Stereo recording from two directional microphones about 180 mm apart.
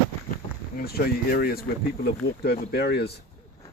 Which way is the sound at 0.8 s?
55° left (ahead or behind).